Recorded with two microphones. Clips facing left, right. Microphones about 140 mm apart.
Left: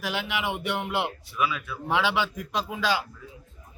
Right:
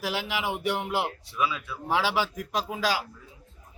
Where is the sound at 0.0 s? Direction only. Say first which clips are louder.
Even; 35° right (ahead or behind).